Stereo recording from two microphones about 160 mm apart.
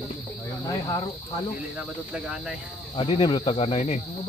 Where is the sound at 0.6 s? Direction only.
20° left (ahead or behind).